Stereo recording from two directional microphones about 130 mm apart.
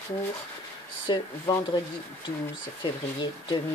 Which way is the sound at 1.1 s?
35° left (ahead or behind).